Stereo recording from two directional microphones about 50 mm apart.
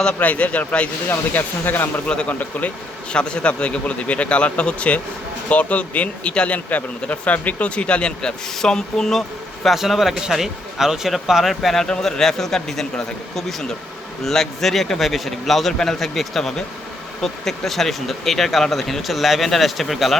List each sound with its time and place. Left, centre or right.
0.2 s speech: left
1.3 s speech: left
2.4 s speech: left
3.1 s speech: centre
9.6 s speech: centre